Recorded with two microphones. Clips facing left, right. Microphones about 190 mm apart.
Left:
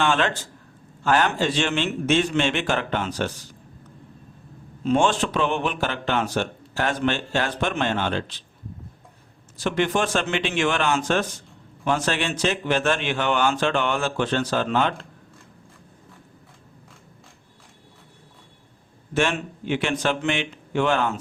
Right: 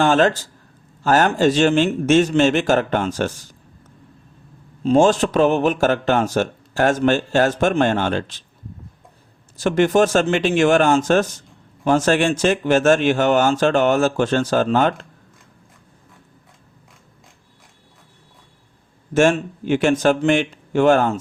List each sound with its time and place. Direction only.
0.0 s speech: 40° right (ahead or behind)
4.8 s speech: 35° right (ahead or behind)
9.6 s speech: 45° right (ahead or behind)
19.1 s speech: 45° right (ahead or behind)